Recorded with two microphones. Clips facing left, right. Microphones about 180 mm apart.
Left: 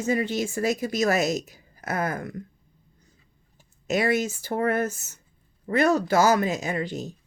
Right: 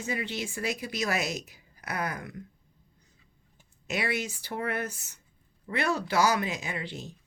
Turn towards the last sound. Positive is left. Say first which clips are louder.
# left 8 dB
turn(degrees=40)  # may be behind; listen again after turning